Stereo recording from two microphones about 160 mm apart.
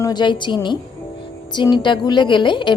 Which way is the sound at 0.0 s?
25° left (ahead or behind).